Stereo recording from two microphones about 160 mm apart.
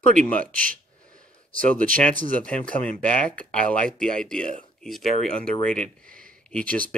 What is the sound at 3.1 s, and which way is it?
Speech, 10° left (ahead or behind).